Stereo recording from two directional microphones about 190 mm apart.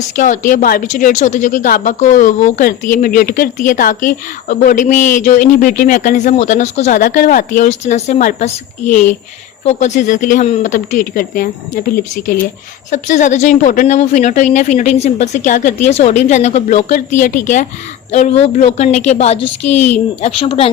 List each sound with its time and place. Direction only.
0.2 s speech: 45° left (ahead or behind)